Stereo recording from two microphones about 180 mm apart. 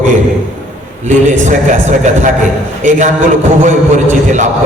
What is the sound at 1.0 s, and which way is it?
A man's voice, 40° right (ahead or behind).